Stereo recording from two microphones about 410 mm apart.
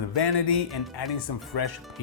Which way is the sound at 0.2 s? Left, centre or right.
Left.